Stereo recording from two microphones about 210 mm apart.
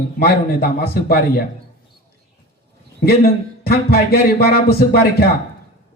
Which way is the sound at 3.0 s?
50° left (ahead or behind).